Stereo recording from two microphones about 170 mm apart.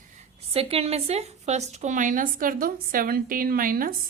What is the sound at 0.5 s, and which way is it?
A woman's voice, 35° right (ahead or behind).